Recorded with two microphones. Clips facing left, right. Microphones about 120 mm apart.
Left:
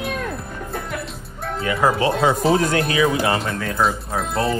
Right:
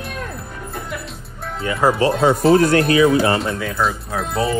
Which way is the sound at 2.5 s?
45° right (ahead or behind).